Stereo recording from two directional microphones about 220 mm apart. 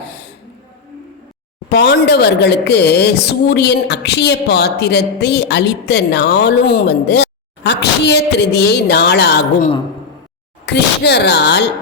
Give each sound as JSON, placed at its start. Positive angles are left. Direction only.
{"t": 1.7, "sound": "a woman's voice", "side_deg": 50}
{"t": 10.7, "sound": "a woman's voice", "side_deg": 50}